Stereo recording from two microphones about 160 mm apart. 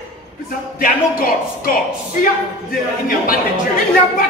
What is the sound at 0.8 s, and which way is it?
Speech, 65° left (ahead or behind).